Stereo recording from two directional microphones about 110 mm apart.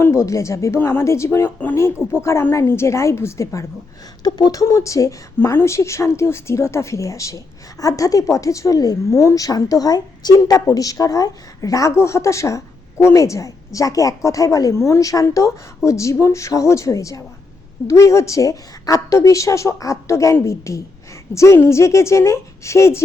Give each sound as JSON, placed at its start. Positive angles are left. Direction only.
{"t": 0.0, "sound": "a woman's voice", "side_deg": 25}
{"t": 4.2, "sound": "a woman's voice", "side_deg": 40}